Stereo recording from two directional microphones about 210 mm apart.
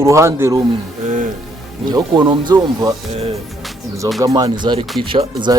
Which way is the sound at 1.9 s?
20° right (ahead or behind).